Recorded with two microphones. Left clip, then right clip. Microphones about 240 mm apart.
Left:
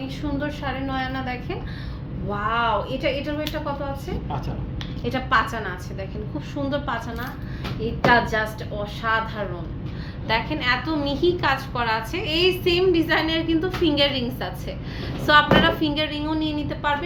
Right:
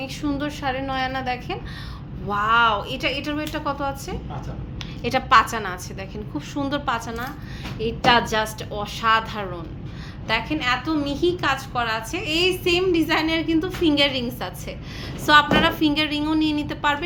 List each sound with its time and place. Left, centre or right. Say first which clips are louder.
0.2 s a woman's voice: right 1 dB; right
5.0 s a woman's voice: right 5 dB; right
10.2 s a woman's voice: even; right